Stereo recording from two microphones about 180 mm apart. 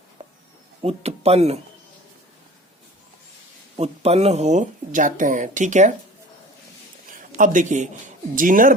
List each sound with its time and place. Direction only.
0.8 s speech: 35° right (ahead or behind)
3.8 s speech: 35° right (ahead or behind)
7.1 s a sound: 45° right (ahead or behind)
8.4 s speech: 50° right (ahead or behind)